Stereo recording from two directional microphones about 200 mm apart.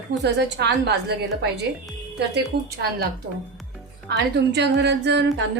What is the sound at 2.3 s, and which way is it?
Speech, 55° right (ahead or behind).